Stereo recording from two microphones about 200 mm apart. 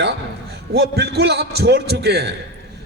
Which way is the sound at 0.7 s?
55° right (ahead or behind).